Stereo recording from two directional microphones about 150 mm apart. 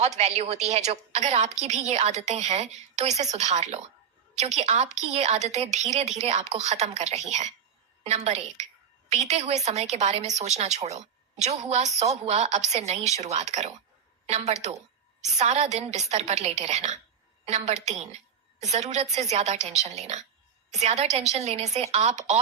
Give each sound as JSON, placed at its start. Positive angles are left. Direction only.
{"t": 0.2, "sound": "speech", "side_deg": -45}